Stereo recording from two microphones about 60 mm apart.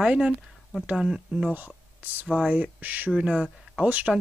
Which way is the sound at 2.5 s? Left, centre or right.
Right.